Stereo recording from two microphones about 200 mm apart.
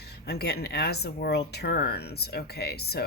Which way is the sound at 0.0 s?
55° left (ahead or behind).